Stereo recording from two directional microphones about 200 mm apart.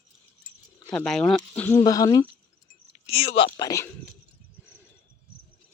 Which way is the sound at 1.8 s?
20° left (ahead or behind).